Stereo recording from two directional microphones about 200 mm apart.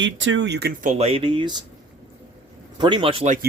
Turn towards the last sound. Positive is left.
turn(degrees=-30)  # may be behind; listen again after turning